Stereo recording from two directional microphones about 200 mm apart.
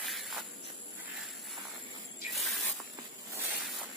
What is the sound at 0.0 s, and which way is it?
Insect, centre (ahead or behind).